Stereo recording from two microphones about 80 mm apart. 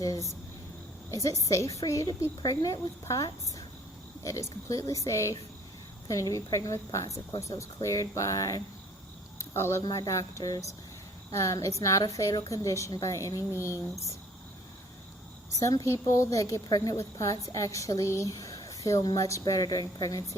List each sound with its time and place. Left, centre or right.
0.0 s a woman's voice: left
9.8 s a woman's voice: left
15.6 s a woman's voice: left